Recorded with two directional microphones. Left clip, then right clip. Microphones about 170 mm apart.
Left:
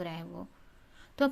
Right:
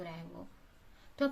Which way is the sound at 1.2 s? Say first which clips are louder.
Left 5 dB; 55° left (ahead or behind).